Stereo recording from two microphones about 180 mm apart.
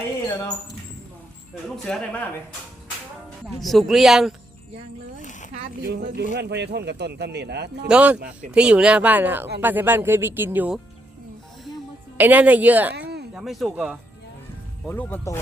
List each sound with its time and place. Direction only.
1.7 s speech: 5° left (ahead or behind)
3.6 s speech: centre (ahead or behind)
5.8 s a man's voice: 60° right (ahead or behind)
7.9 s speech: 5° right (ahead or behind)
12.1 s speech: 10° right (ahead or behind)
12.9 s a sound: 65° right (ahead or behind)
13.3 s speech: centre (ahead or behind)
14.8 s speech: 10° left (ahead or behind)